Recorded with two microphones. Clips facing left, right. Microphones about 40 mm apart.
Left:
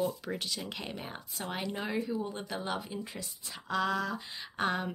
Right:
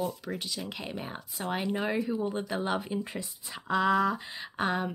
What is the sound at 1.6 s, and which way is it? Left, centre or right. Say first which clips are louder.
Speech: right 4 dB; centre.